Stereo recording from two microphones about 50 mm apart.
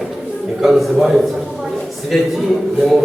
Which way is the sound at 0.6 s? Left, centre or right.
Centre.